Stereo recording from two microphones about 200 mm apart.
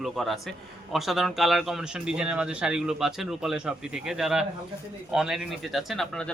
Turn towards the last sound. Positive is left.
turn(degrees=0)  # may be behind; listen again after turning